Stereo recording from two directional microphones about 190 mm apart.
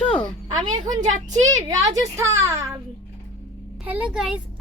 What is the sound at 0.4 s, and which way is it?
Speech, 25° right (ahead or behind).